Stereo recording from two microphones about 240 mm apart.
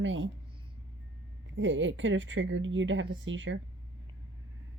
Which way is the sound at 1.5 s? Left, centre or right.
Right.